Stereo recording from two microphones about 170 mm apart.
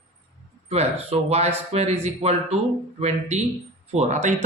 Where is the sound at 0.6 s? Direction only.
35° right (ahead or behind).